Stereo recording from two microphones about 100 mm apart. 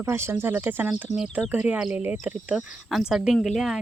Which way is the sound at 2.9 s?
5° right (ahead or behind).